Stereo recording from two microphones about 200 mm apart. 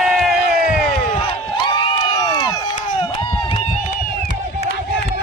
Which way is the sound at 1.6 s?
20° left (ahead or behind).